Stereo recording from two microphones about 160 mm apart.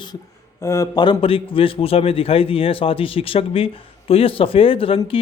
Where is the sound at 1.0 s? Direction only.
30° left (ahead or behind).